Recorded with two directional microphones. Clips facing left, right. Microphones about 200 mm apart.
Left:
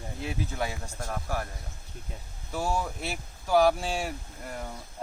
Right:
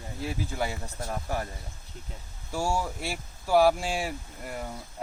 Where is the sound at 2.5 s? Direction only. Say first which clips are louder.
Right 1 dB; 10° right (ahead or behind).